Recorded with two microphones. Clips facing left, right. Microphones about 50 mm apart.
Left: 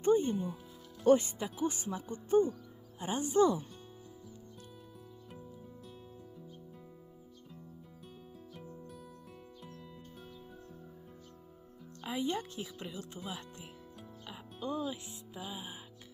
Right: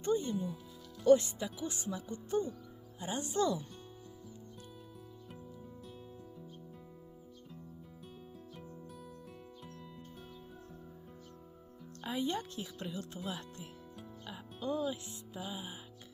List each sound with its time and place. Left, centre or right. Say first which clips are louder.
0.0 s music: left 5 dB; left
0.3 s speech: left 1 dB; left
1.0 s speech: even; left
12.0 s a woman's voice: left 1 dB; centre
14.3 s music: right 1 dB; centre